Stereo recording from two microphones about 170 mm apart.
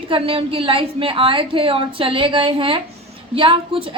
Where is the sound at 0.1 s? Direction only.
30° right (ahead or behind).